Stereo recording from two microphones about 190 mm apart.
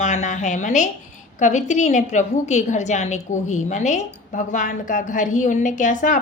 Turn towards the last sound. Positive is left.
turn(degrees=40)  # may be behind; listen again after turning